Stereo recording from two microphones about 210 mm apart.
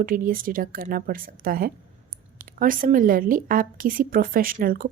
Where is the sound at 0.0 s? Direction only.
40° right (ahead or behind).